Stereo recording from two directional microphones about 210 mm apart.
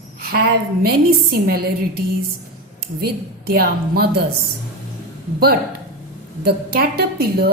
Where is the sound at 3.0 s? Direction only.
50° right (ahead or behind).